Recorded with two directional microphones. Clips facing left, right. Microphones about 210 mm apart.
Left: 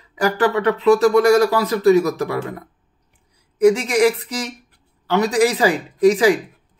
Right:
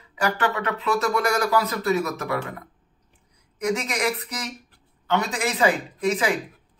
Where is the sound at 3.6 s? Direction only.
30° left (ahead or behind).